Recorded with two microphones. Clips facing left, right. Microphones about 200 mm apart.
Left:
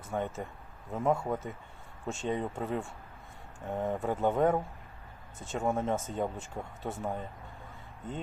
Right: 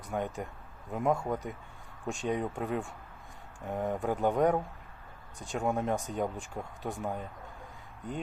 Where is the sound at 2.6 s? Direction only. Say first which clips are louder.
Right 1 dB; centre (ahead or behind).